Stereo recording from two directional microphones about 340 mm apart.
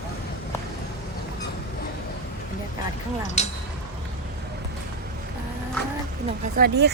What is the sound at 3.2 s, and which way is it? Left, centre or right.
Speech, centre.